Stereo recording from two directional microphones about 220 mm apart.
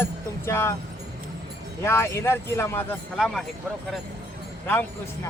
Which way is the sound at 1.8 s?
10° left (ahead or behind).